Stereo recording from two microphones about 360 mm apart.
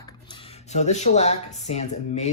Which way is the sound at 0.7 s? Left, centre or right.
Centre.